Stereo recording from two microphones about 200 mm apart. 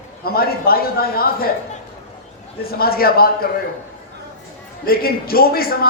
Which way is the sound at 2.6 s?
50° left (ahead or behind).